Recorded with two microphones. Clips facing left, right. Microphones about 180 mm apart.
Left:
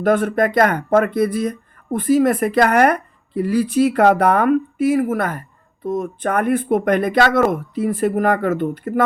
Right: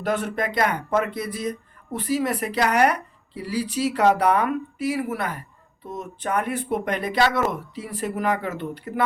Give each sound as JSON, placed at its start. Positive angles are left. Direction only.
{"t": 0.0, "sound": "speech", "side_deg": 50}